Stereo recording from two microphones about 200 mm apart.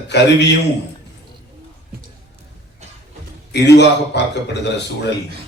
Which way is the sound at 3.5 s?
60° left (ahead or behind).